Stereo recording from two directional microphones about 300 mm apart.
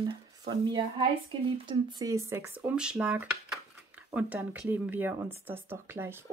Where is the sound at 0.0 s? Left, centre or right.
Centre.